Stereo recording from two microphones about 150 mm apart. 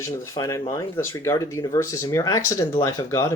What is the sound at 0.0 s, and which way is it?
Speech, 20° left (ahead or behind).